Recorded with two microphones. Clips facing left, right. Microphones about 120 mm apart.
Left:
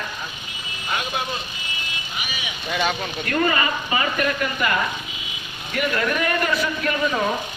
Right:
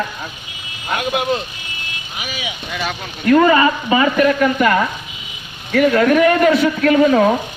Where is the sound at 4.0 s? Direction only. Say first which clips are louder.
Right 11 dB; 75° right (ahead or behind).